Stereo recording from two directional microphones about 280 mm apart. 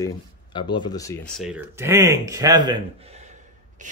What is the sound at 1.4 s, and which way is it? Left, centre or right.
Speech, centre.